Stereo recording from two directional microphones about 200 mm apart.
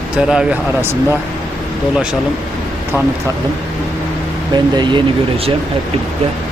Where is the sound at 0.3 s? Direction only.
5° right (ahead or behind).